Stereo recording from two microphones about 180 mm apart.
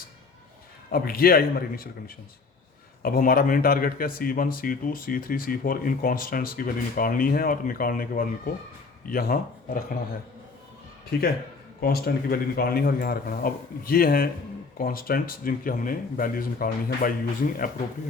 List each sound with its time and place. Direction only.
0.9 s speech: 55° left (ahead or behind)
11.8 s speech: 60° left (ahead or behind)